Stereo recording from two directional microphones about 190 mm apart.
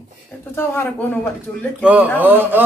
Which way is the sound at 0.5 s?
10° left (ahead or behind).